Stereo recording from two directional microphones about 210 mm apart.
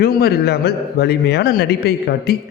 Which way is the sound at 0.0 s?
45° left (ahead or behind).